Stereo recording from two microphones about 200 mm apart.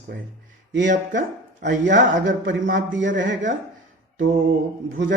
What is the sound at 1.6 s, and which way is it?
Speech, 65° right (ahead or behind).